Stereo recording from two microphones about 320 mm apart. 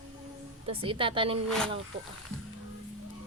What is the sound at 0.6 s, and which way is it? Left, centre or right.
Speech, centre.